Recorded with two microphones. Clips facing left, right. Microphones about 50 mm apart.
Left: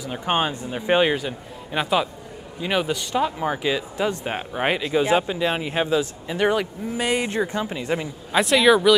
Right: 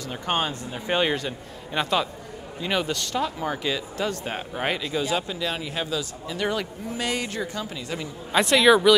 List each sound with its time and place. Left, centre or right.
0.0 s a man's voice: centre
8.3 s speech: centre